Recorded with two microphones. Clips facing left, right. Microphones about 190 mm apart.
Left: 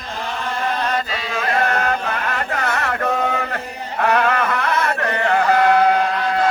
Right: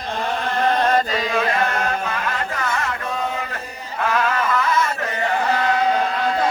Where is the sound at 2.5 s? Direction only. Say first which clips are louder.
Left 3 dB; 65° left (ahead or behind).